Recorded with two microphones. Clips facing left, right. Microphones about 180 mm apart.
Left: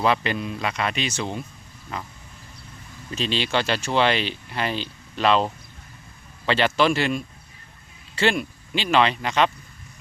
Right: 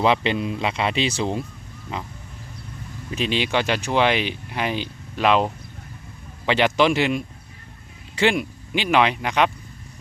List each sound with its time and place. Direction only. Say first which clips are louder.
0.0 s speech: right 3 dB; 20° right (ahead or behind)
1.9 s speech: right 2 dB; 15° right (ahead or behind)
3.1 s speech: right 2 dB; 15° right (ahead or behind)